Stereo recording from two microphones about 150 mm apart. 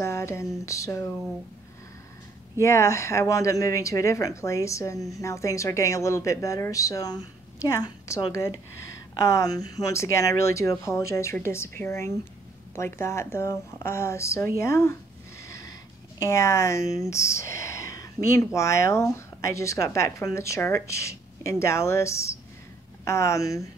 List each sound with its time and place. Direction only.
0.0 s a sound: 20° left (ahead or behind)
2.6 s speech: 20° left (ahead or behind)
16.2 s speech: 20° left (ahead or behind)